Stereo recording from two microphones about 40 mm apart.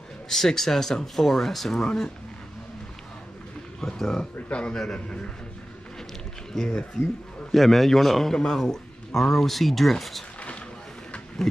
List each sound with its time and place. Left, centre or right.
0.3 s speech: centre
3.8 s speech: centre
4.5 s a man's voice: left
6.5 s a man's voice: centre